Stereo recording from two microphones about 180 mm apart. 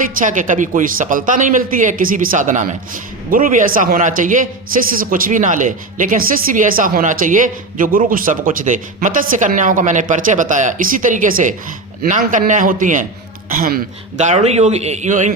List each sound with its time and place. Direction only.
0.2 s speech: 45° right (ahead or behind)
14.2 s speech: 40° right (ahead or behind)